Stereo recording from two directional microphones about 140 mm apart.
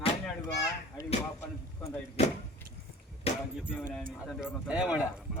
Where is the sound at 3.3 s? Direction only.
45° left (ahead or behind).